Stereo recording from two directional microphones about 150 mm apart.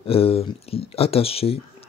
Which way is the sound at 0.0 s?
40° left (ahead or behind).